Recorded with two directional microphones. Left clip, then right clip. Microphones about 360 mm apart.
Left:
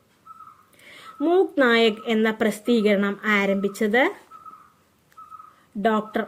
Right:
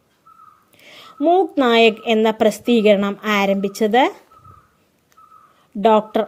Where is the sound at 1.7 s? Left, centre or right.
Centre.